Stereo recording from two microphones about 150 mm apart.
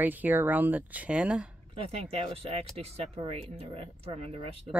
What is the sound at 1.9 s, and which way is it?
Speech, 40° right (ahead or behind).